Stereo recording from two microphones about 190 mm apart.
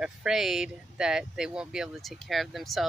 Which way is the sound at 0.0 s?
5° right (ahead or behind).